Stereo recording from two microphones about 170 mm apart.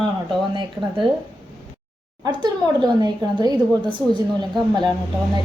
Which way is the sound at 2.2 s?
25° right (ahead or behind).